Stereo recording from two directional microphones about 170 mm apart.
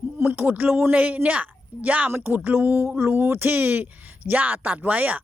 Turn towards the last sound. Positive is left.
turn(degrees=-10)  # may be behind; listen again after turning